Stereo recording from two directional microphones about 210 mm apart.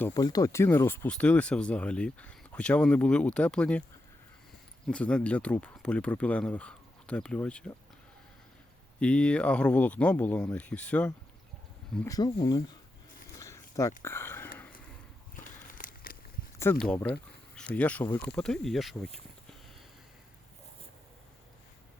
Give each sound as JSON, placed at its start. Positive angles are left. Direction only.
{"t": 0.1, "sound": "speech", "side_deg": 20}
{"t": 4.9, "sound": "speech", "side_deg": 5}
{"t": 9.0, "sound": "speech", "side_deg": 5}
{"t": 12.0, "sound": "speech", "side_deg": 15}
{"t": 13.4, "sound": "a sound", "side_deg": 15}
{"t": 14.0, "sound": "speech", "side_deg": 10}
{"t": 15.4, "sound": "a sound", "side_deg": 40}
{"t": 16.8, "sound": "speech", "side_deg": 5}